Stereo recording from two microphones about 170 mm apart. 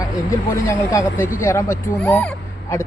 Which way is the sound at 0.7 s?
15° left (ahead or behind).